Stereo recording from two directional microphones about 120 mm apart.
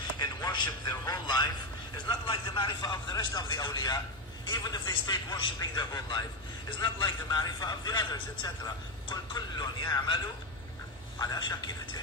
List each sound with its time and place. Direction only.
0.2 s a man's voice: 30° left (ahead or behind)